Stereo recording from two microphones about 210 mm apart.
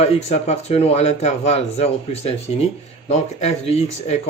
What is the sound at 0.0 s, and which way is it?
Speech, 30° left (ahead or behind).